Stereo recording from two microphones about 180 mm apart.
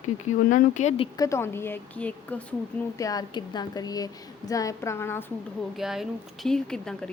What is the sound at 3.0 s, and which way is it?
A woman's voice, 20° left (ahead or behind).